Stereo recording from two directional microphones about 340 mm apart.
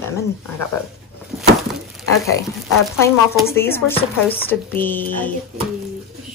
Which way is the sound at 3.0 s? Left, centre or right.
Centre.